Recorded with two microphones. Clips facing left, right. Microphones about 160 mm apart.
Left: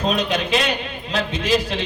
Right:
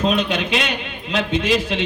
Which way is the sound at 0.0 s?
40° left (ahead or behind).